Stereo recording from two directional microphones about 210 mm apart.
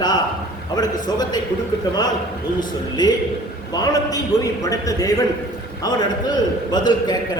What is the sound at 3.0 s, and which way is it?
A man's voice, 20° left (ahead or behind).